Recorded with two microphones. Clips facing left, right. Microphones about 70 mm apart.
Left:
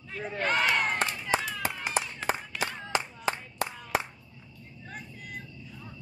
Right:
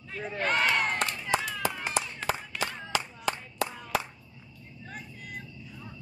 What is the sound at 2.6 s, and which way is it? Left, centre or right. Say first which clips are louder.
Clapping: left 1 dB; left.